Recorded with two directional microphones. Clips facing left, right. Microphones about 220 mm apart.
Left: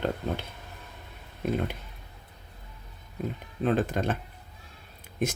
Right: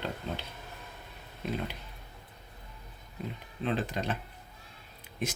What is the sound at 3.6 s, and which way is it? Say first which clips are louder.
Speech: left 6 dB; 45° left (ahead or behind).